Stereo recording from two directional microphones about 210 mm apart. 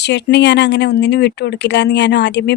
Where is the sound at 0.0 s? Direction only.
55° left (ahead or behind).